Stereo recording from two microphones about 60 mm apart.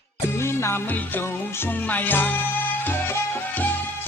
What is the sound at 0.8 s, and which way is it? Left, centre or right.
Music, left.